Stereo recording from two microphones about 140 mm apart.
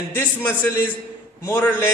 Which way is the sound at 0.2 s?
15° left (ahead or behind).